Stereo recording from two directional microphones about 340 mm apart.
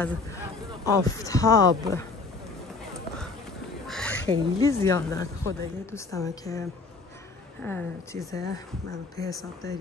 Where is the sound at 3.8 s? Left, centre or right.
Centre.